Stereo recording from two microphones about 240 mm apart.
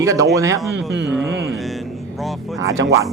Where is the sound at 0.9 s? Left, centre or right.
Right.